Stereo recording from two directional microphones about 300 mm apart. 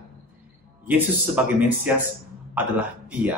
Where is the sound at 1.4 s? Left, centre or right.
Centre.